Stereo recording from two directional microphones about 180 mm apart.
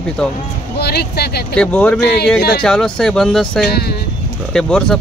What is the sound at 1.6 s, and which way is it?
Speech, 5° left (ahead or behind).